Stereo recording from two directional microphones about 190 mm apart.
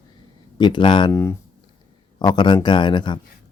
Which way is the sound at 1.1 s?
15° left (ahead or behind).